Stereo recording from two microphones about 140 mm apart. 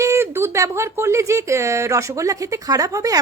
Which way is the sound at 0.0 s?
20° right (ahead or behind).